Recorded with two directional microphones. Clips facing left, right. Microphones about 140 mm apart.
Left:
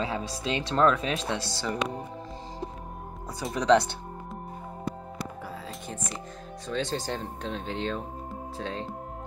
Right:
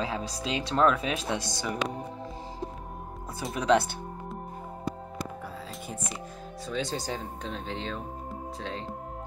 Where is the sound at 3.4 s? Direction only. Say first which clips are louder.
Left 2 dB; 5° right (ahead or behind).